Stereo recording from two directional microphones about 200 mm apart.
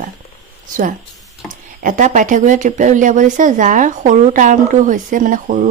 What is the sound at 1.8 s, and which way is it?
Speech, 40° right (ahead or behind).